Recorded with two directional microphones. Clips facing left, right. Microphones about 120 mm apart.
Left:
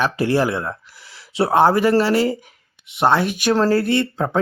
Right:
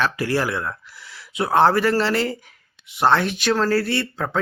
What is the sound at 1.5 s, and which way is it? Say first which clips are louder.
Speech: left 2 dB; 15° left (ahead or behind).